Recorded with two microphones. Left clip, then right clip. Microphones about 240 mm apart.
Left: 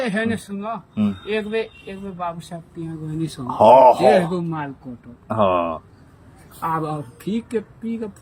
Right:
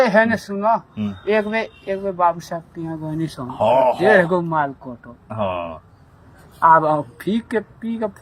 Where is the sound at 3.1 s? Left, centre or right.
Centre.